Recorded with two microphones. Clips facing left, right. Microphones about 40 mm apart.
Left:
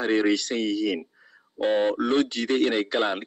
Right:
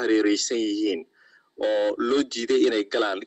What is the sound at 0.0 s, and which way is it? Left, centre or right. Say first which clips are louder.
A man's voice: right 1 dB; left.